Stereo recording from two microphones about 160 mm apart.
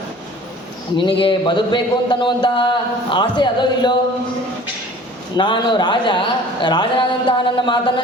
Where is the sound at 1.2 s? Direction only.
30° left (ahead or behind).